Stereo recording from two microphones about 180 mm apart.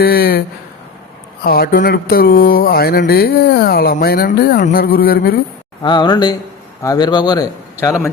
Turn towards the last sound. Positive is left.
turn(degrees=20)  # may be behind; listen again after turning